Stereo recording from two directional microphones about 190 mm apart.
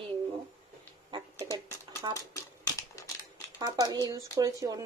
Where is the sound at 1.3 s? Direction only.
15° left (ahead or behind).